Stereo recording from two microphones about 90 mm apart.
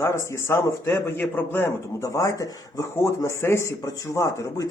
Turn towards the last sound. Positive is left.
turn(degrees=40)  # may be behind; listen again after turning